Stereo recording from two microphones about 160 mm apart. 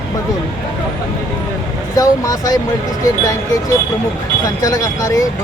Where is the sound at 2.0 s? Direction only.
20° left (ahead or behind).